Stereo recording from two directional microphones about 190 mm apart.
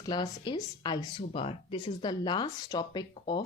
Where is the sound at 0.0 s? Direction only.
20° left (ahead or behind).